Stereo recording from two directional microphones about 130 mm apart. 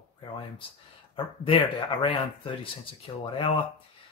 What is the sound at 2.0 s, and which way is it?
Speech, 45° left (ahead or behind).